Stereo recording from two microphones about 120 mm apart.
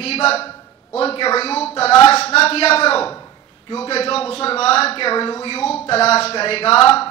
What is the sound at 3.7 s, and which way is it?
A man's voice, 55° left (ahead or behind).